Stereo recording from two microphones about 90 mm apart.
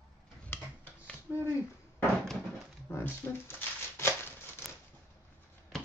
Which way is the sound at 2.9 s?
25° left (ahead or behind).